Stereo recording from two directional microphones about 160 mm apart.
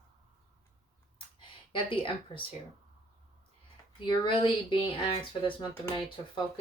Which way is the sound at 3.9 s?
30° left (ahead or behind).